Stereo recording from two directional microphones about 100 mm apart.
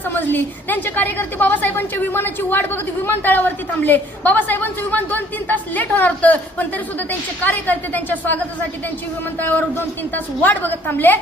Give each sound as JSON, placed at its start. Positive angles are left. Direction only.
{"t": 0.1, "sound": "a woman's voice", "side_deg": 20}
{"t": 9.4, "sound": "a woman's voice", "side_deg": 20}